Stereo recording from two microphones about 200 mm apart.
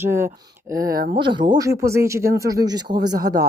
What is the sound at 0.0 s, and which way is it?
Speech, 10° right (ahead or behind).